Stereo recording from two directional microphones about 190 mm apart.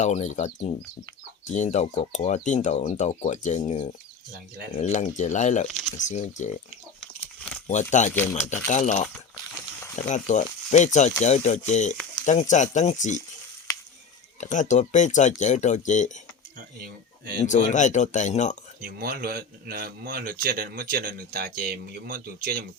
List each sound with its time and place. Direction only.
0.0 s speech: 40° left (ahead or behind)
4.3 s speech: 55° right (ahead or behind)
4.8 s speech: 40° left (ahead or behind)
7.0 s a sound: centre (ahead or behind)
7.7 s speech: 40° left (ahead or behind)
14.4 s speech: 40° left (ahead or behind)
16.8 s speech: 55° right (ahead or behind)
17.4 s speech: 40° left (ahead or behind)
18.8 s speech: 55° right (ahead or behind)